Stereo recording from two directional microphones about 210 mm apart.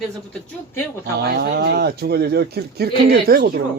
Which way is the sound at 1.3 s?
50° right (ahead or behind).